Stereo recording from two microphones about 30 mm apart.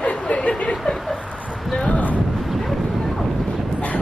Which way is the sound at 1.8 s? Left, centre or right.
Left.